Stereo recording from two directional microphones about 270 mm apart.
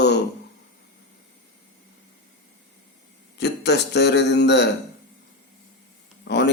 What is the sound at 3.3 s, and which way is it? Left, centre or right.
Speech, left.